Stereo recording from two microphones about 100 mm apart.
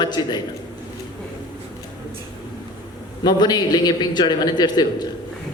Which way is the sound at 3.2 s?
45° left (ahead or behind).